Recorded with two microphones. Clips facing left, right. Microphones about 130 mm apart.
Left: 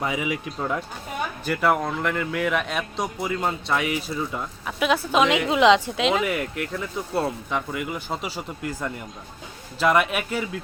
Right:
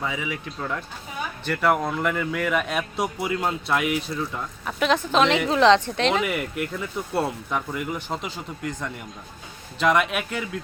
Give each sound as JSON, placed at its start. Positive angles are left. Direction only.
{"t": 0.0, "sound": "speech", "side_deg": 15}
{"t": 1.5, "sound": "speech", "side_deg": 0}